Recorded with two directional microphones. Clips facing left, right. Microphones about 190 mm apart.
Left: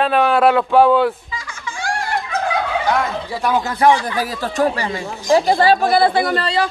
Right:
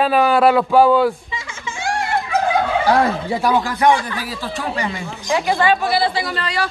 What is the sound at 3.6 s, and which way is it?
Speech, 25° left (ahead or behind).